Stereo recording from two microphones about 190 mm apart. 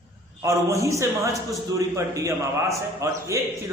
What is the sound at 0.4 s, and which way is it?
Speech, 15° right (ahead or behind).